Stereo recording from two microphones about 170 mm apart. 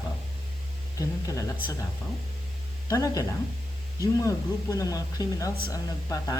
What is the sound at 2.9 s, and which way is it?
Speech, 20° left (ahead or behind).